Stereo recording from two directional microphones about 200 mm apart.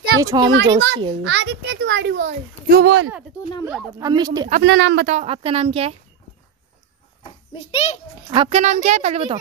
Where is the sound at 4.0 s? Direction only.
20° right (ahead or behind).